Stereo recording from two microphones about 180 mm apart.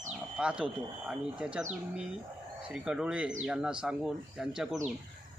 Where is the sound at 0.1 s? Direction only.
5° right (ahead or behind).